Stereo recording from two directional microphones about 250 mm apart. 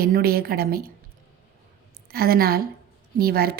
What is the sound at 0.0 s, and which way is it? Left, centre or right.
Speech, right.